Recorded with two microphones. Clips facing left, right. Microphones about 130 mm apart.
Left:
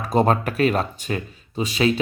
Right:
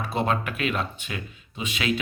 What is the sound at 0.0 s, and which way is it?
Speech, 40° left (ahead or behind).